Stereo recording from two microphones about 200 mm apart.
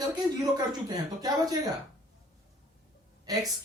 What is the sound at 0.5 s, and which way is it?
Speech, 20° right (ahead or behind).